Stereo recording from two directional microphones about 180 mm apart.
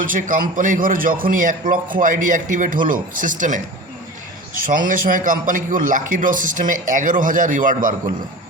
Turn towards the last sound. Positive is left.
turn(degrees=-50)  # may be behind; listen again after turning